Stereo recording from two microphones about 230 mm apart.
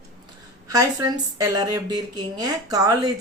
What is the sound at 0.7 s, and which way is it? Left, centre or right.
Speech, centre.